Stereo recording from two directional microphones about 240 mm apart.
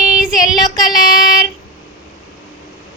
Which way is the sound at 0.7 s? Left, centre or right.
Centre.